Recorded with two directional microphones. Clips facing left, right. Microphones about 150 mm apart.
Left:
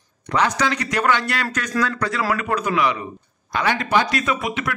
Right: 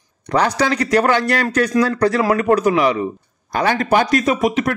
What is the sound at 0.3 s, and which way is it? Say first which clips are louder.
A man's voice: right 4 dB; 35° right (ahead or behind).